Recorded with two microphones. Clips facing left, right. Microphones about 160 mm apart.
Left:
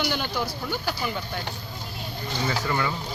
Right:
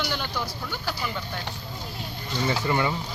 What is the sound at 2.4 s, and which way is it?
Speech, 20° right (ahead or behind).